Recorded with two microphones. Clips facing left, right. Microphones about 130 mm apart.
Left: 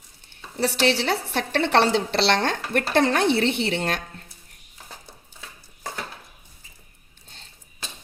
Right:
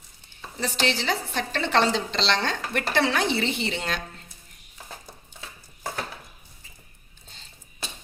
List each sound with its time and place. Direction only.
0.3 s a woman's voice: 70° left (ahead or behind); by 3.2 s 50° left (ahead or behind)
3.3 s a woman's voice: 65° left (ahead or behind)